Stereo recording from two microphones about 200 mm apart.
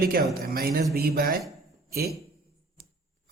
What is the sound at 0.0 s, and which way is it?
A man's voice, 45° right (ahead or behind).